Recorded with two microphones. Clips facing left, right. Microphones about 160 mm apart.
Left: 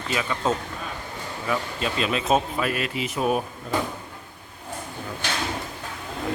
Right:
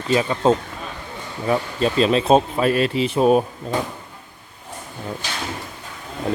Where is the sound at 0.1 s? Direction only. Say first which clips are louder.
Right 8 dB; 30° right (ahead or behind).